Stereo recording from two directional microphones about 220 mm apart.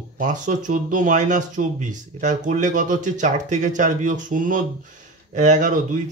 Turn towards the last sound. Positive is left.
turn(degrees=-35)  # may be behind; listen again after turning